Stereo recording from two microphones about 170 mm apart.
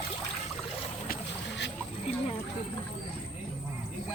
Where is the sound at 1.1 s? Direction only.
90° left.